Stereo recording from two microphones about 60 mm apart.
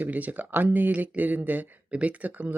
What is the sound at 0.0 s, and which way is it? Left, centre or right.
Speech, right.